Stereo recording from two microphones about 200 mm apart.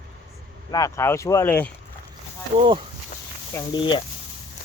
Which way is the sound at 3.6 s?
25° left (ahead or behind).